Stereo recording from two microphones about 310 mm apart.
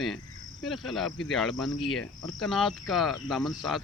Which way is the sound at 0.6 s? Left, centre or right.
Centre.